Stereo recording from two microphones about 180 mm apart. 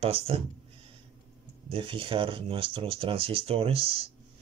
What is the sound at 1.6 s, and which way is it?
Speech, 30° right (ahead or behind).